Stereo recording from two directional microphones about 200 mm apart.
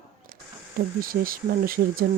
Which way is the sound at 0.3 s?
45° right (ahead or behind).